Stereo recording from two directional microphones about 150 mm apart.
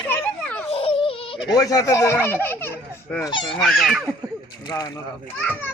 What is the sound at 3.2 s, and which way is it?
Speech, 30° left (ahead or behind).